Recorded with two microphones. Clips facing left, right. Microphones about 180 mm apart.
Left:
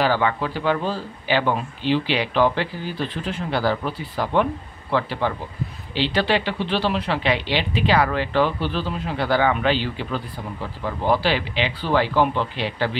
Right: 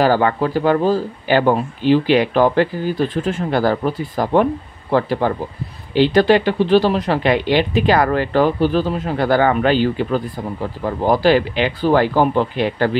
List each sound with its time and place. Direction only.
0.0 s speech: 45° right (ahead or behind)